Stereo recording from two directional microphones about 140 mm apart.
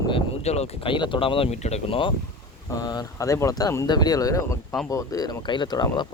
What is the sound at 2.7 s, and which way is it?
Speech, 25° left (ahead or behind).